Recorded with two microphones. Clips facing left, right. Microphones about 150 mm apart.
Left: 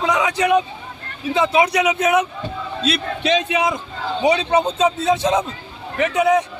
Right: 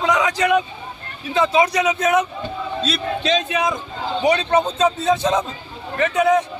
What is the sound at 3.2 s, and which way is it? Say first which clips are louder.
A man's voice: left 2 dB; 15° left (ahead or behind).